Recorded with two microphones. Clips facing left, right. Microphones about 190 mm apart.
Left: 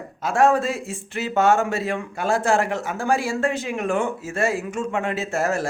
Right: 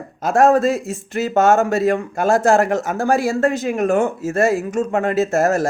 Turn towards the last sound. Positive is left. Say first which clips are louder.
# right 7 dB
turn(degrees=-45)  # may be behind; listen again after turning